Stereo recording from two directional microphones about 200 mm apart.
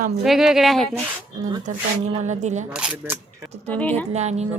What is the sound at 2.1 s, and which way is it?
Speech, 35° right (ahead or behind).